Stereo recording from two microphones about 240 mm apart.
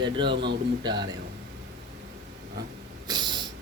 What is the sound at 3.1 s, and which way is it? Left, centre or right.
Snort, centre.